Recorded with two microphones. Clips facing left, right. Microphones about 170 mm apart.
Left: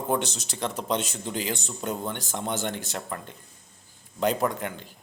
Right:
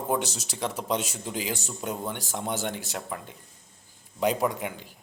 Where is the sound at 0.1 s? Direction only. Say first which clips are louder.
Left 1 dB; 10° right (ahead or behind).